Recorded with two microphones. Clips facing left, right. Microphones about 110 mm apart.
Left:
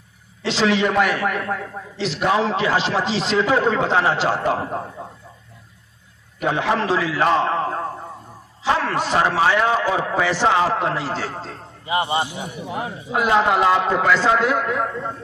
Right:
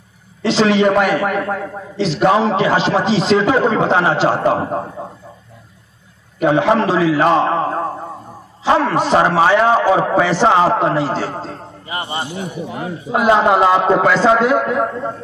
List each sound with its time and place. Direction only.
0.5 s a man's voice: 25° right (ahead or behind)
6.4 s a man's voice: 25° right (ahead or behind)
9.2 s a man's voice: 35° right (ahead or behind)
10.3 s a man's voice: 30° right (ahead or behind)
11.8 s a man's voice: 15° left (ahead or behind)
13.1 s a man's voice: 25° right (ahead or behind)